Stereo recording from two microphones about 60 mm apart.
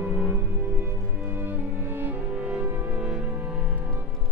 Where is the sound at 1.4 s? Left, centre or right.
Right.